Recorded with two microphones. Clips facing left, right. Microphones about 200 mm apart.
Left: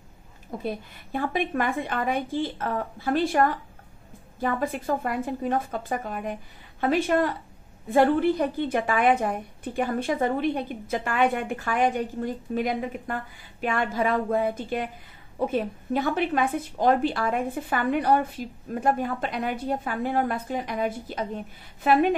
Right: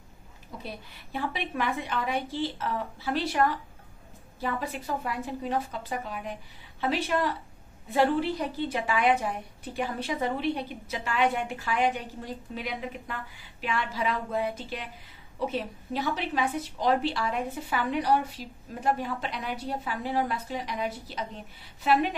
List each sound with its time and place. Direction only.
0.5 s a woman's voice: 50° left (ahead or behind)